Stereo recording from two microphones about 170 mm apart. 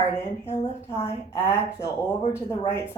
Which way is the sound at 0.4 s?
40° left (ahead or behind).